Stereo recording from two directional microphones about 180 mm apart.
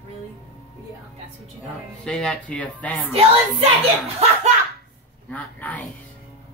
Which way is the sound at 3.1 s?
35° right (ahead or behind).